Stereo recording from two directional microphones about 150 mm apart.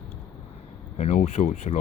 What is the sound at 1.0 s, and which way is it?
Speech, 45° left (ahead or behind).